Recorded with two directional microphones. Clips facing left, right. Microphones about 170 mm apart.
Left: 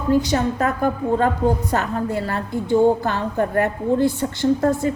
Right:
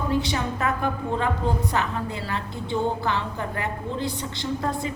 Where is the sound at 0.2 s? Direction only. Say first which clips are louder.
Left 6 dB; 40° left (ahead or behind).